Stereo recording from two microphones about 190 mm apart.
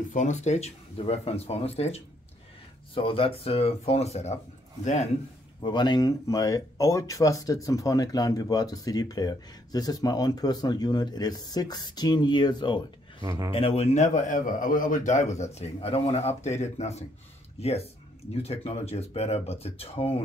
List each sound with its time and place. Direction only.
0.1 s a man's voice: 40° left (ahead or behind)
5.6 s speech: 25° left (ahead or behind)
13.2 s speech: 15° right (ahead or behind)
13.5 s a man's voice: 30° left (ahead or behind)